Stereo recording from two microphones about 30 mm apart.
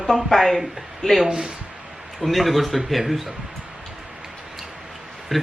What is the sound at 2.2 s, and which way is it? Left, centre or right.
Speech, centre.